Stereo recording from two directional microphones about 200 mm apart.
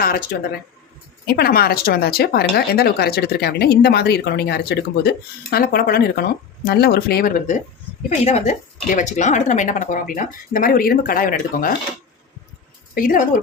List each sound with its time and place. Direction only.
0.0 s a woman's voice: 45° left (ahead or behind)
1.3 s a woman's voice: 50° left (ahead or behind)
8.1 s speech: 35° left (ahead or behind)
12.9 s a woman's voice: 45° left (ahead or behind)